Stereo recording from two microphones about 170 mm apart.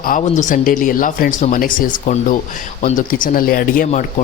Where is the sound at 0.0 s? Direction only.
50° left (ahead or behind).